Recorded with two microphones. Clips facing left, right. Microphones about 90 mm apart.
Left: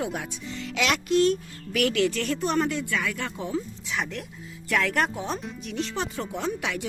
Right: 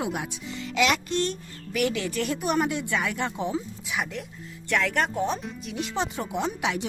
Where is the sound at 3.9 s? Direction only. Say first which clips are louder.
Right 2 dB; 5° right (ahead or behind).